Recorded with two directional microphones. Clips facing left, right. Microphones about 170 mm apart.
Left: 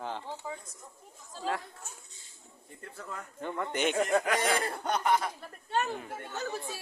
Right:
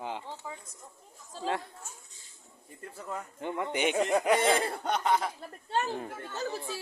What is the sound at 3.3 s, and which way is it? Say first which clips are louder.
Speech: right 1 dB; 15° right (ahead or behind).